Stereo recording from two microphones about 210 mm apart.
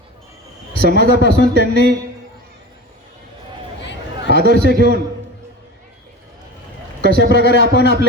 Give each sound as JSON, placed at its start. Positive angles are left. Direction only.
{"t": 0.8, "sound": "speech", "side_deg": -50}
{"t": 4.3, "sound": "speech", "side_deg": -45}
{"t": 7.0, "sound": "speech", "side_deg": -50}